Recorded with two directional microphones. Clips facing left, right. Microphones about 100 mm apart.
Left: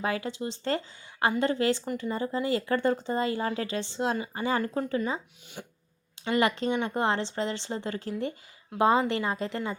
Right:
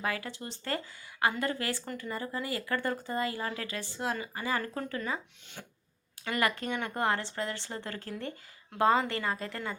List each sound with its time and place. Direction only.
0.0 s speech: 25° left (ahead or behind)
5.6 s a sound: 15° left (ahead or behind)
6.2 s speech: 20° left (ahead or behind)